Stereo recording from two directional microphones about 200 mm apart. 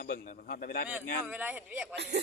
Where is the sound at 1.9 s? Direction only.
55° right (ahead or behind).